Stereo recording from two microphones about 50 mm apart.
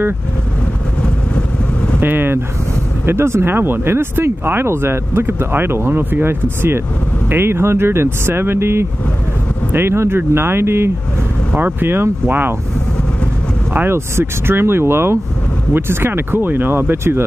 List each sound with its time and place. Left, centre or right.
2.0 s speech: right
3.1 s speech: right
11.5 s speech: right
13.8 s speech: right